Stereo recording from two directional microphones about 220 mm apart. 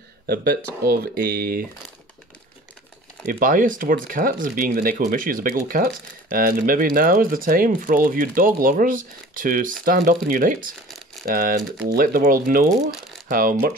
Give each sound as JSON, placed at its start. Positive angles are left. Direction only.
{"t": 0.3, "sound": "speech", "side_deg": -45}
{"t": 3.3, "sound": "speech", "side_deg": -40}